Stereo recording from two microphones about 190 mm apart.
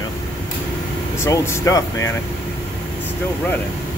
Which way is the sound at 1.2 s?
15° left (ahead or behind).